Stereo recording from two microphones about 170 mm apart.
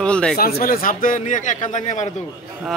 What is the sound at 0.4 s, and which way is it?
A man's voice, 60° left (ahead or behind).